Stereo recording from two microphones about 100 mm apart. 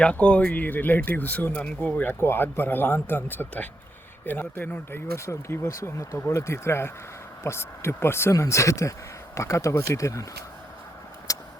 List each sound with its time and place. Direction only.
0.0 s speech: 10° left (ahead or behind); by 10.2 s 30° left (ahead or behind)
11.3 s vehicle: 35° left (ahead or behind)